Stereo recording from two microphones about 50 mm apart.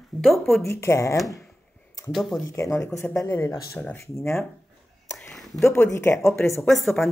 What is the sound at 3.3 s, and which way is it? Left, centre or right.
Speech, left.